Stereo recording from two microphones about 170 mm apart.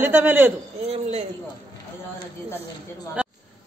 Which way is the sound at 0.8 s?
40° right (ahead or behind).